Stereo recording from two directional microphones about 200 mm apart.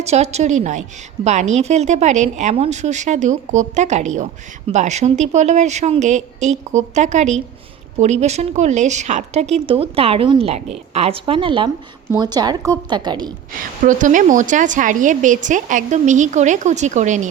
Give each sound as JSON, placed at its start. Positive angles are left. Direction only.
{"t": 0.0, "sound": "a woman's voice", "side_deg": -35}
{"t": 13.8, "sound": "a woman's voice", "side_deg": -40}